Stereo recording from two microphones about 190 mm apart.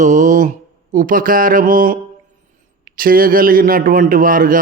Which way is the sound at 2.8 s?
50° right (ahead or behind).